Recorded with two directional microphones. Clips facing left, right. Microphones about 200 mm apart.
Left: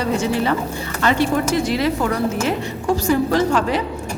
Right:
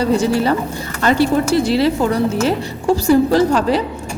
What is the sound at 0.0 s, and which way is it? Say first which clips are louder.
A woman's voice: right 4 dB; 35° right (ahead or behind).